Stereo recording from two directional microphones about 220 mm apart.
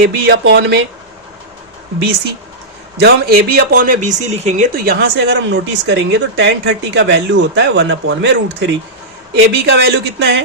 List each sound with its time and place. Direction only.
0.0 s speech: 50° right (ahead or behind)
3.0 s speech: 45° right (ahead or behind)